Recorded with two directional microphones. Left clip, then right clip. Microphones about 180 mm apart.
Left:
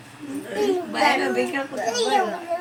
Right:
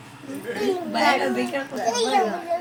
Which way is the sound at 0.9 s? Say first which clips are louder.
Right 2 dB; 15° left (ahead or behind).